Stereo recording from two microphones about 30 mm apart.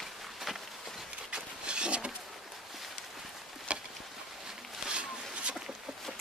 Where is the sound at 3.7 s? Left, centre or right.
Right.